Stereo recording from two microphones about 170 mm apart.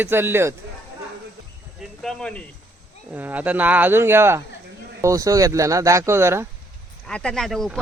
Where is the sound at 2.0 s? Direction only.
5° left (ahead or behind).